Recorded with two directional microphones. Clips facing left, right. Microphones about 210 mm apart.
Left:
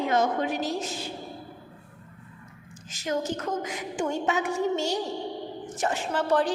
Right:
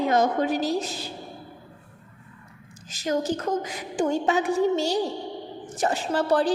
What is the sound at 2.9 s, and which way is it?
A woman's voice, 35° right (ahead or behind).